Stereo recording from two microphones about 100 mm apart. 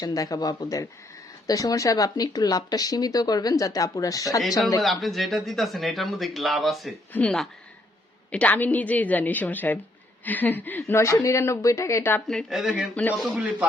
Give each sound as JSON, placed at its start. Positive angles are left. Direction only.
{"t": 0.0, "sound": "speech", "side_deg": 35}
{"t": 4.8, "sound": "speech", "side_deg": 0}
{"t": 7.1, "sound": "a woman's voice", "side_deg": 15}
{"t": 12.3, "sound": "speech", "side_deg": 5}